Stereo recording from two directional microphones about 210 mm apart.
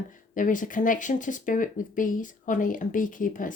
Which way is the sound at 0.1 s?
40° left (ahead or behind).